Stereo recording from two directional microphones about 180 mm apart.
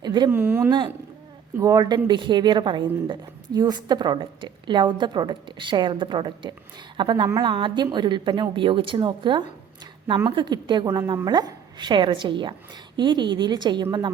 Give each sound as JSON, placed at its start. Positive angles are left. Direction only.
{"t": 0.0, "sound": "a sound", "side_deg": -25}
{"t": 0.3, "sound": "a woman's voice", "side_deg": -10}
{"t": 11.0, "sound": "speech", "side_deg": -15}
{"t": 11.3, "sound": "a woman's voice", "side_deg": -25}